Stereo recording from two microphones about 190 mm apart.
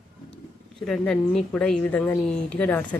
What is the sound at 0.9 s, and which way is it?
A woman's voice, 5° left (ahead or behind).